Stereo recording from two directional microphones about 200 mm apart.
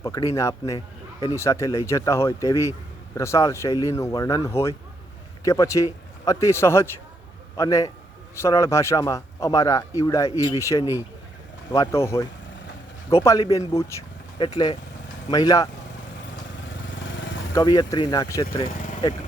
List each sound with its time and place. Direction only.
0.0 s a man's voice: 15° left (ahead or behind)
17.5 s speech: 20° left (ahead or behind)
18.7 s vehicle: 40° left (ahead or behind)